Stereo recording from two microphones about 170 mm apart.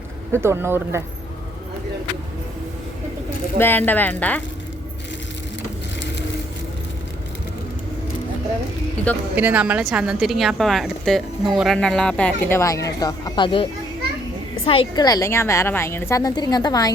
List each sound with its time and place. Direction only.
0.3 s speech: 15° right (ahead or behind)
3.6 s speech: 10° left (ahead or behind)
9.3 s a woman's voice: 10° right (ahead or behind); by 16.9 s 25° left (ahead or behind)